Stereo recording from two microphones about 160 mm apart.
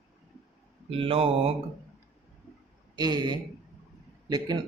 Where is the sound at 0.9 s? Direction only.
35° right (ahead or behind).